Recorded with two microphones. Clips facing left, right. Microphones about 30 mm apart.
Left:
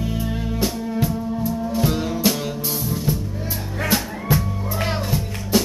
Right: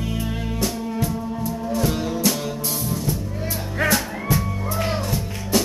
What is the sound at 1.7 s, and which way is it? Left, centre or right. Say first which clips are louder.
Music: right 1 dB; centre.